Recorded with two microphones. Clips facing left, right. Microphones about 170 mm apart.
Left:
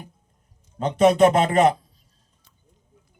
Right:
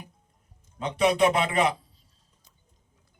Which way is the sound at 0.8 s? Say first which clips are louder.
Left 6 dB; 45° left (ahead or behind).